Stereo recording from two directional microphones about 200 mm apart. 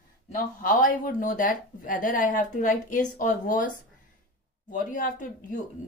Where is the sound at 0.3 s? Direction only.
40° left (ahead or behind).